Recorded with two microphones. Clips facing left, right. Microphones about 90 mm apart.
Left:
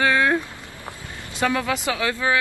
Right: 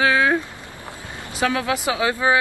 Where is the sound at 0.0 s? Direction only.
10° right (ahead or behind).